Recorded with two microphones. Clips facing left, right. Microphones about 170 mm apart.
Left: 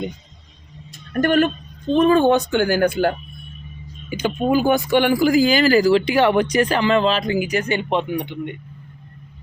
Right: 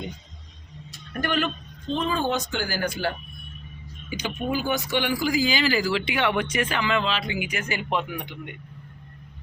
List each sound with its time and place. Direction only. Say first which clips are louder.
1.1 s a man's voice: left 9 dB; 50° left (ahead or behind)
4.4 s speech: left 9 dB; 50° left (ahead or behind); by 8.4 s 30° left (ahead or behind)